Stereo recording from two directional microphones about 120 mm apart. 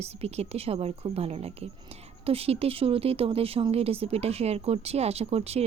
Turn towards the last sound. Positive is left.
turn(degrees=-60)  # may be behind; listen again after turning